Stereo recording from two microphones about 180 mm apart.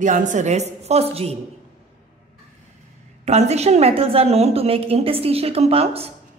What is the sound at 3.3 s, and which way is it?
A woman's voice, 40° right (ahead or behind).